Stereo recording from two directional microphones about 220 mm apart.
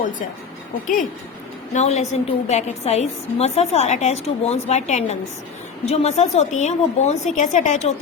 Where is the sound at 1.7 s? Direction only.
30° left (ahead or behind).